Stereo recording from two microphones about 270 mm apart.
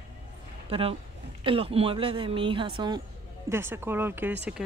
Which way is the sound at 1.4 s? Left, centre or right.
Right.